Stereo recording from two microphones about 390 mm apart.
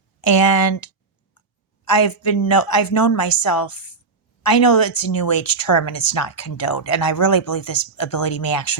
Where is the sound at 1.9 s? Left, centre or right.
Left.